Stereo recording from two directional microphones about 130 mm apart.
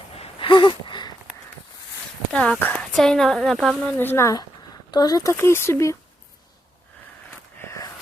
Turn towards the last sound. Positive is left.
turn(degrees=25)  # may be behind; listen again after turning